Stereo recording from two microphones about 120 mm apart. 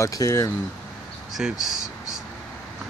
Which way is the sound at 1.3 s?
5° right (ahead or behind).